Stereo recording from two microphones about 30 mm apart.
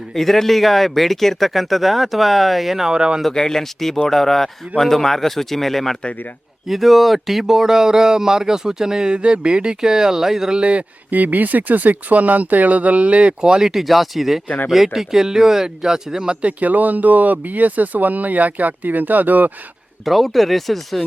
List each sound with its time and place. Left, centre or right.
0.1 s speech: centre
2.9 s speech: right
3.3 s a man's voice: centre
6.7 s speech: centre; by 9.1 s right
9.1 s speech: right
9.8 s speech: right
10.6 s speech: right
11.1 s speech: right
13.6 s speech: centre
14.4 s speech: left
14.7 s speech: centre; by 16.4 s right
16.4 s speech: right
20.1 s speech: centre